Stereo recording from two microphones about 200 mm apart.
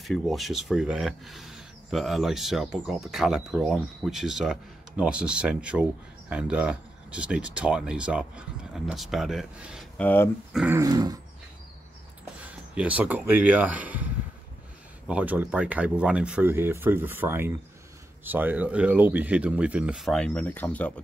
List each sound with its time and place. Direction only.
0.0 s speech: centre (ahead or behind)
9.9 s speech: 10° left (ahead or behind)
10.5 s speech: 5° right (ahead or behind)
10.8 s dog: 20° right (ahead or behind)
12.7 s speech: 5° right (ahead or behind)
15.0 s speech: 5° right (ahead or behind)